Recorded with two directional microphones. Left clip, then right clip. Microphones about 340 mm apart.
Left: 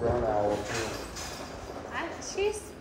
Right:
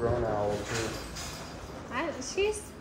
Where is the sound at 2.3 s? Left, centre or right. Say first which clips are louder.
Even; right.